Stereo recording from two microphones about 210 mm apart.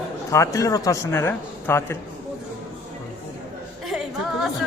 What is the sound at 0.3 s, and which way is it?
Speech, 15° left (ahead or behind).